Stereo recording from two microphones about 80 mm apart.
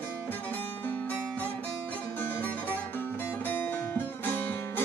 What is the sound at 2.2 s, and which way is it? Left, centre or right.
Music, left.